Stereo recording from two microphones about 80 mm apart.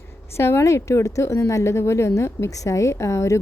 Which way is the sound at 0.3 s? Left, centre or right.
Left.